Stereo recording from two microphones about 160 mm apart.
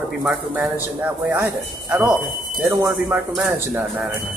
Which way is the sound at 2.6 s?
15° right (ahead or behind).